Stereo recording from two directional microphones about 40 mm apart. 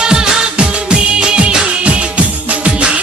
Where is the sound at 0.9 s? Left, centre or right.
Right.